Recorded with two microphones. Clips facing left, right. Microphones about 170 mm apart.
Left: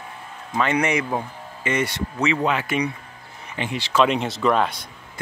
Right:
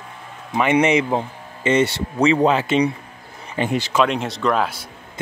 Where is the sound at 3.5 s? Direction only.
45° right (ahead or behind).